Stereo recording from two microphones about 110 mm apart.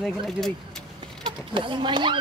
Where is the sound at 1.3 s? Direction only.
50° right (ahead or behind).